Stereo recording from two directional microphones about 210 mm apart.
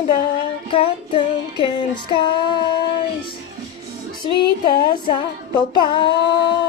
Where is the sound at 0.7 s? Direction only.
25° left (ahead or behind).